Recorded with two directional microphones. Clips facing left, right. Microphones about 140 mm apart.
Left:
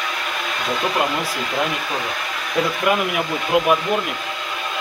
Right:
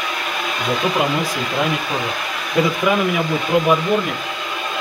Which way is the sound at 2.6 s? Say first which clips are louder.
Right 2 dB; 5° left (ahead or behind).